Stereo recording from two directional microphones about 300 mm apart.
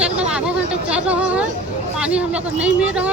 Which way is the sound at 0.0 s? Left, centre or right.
Centre.